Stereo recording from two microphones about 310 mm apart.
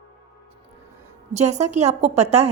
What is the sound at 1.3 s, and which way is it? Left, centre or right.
A woman's voice, right.